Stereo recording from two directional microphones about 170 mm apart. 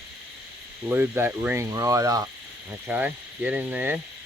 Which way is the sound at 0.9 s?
10° right (ahead or behind).